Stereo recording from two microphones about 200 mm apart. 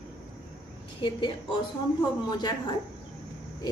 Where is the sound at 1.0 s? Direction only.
25° left (ahead or behind).